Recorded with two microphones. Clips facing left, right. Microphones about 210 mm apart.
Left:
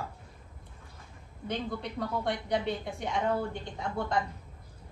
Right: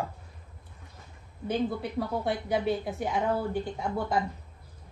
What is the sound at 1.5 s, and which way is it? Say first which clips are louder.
A woman's voice: right 5 dB; 5° right (ahead or behind).